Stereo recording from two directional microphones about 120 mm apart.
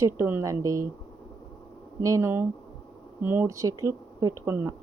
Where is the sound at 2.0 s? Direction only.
25° right (ahead or behind).